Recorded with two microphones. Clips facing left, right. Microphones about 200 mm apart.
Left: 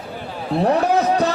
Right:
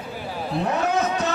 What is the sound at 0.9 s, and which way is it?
Vehicle, 35° left (ahead or behind).